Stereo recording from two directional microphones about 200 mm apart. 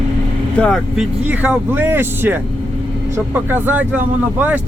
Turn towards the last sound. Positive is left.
turn(degrees=-10)  # may be behind; listen again after turning